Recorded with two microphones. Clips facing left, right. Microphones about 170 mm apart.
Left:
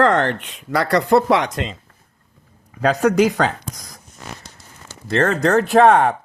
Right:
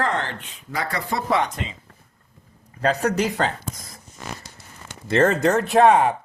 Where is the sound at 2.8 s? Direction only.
90° left.